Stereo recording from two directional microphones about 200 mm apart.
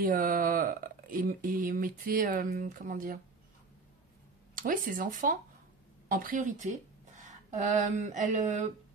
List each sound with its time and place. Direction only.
0.0 s speech: 45° right (ahead or behind)
4.6 s a woman's voice: 45° right (ahead or behind)